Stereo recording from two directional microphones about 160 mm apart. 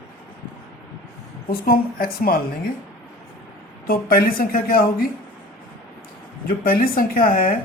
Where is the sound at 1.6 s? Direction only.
65° left (ahead or behind).